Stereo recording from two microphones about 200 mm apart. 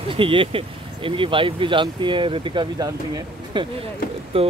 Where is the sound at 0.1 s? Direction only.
25° right (ahead or behind).